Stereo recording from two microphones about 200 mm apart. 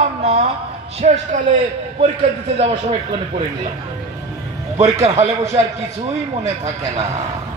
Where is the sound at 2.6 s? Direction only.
30° right (ahead or behind).